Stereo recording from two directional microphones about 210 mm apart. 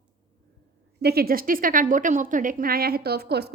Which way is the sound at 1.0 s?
50° right (ahead or behind).